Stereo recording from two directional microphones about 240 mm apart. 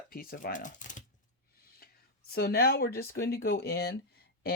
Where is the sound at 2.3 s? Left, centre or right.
Left.